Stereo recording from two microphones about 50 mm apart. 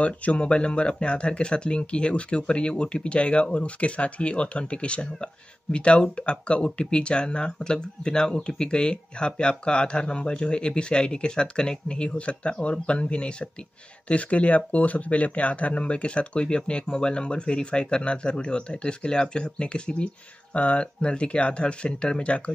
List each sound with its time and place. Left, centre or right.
0.0 s speech: left